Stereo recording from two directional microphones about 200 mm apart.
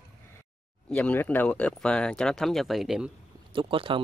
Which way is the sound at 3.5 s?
25° right (ahead or behind).